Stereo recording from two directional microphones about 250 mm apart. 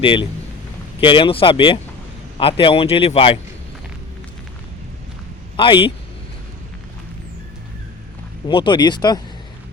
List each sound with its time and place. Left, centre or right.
0.0 s speech: centre
5.5 s speech: centre
8.4 s speech: centre